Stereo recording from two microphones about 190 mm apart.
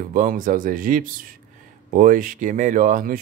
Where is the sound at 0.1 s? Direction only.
45° right (ahead or behind).